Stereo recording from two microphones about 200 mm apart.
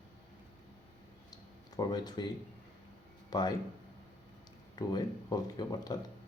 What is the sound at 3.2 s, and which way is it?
Speech, 20° left (ahead or behind).